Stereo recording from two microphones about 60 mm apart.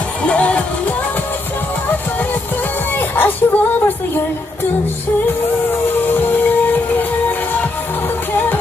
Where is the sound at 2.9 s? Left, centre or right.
Left.